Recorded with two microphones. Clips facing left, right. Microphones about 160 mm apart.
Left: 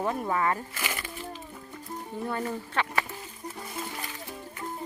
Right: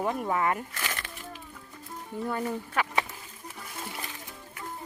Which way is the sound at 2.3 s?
10° right (ahead or behind).